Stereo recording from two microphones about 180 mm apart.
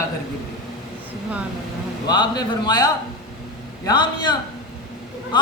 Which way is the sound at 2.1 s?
25° left (ahead or behind).